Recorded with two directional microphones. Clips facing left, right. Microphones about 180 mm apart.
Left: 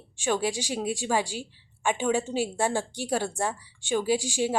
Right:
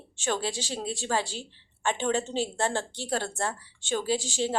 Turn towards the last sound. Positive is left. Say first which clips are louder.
# left 2 dB
turn(degrees=10)  # may be behind; listen again after turning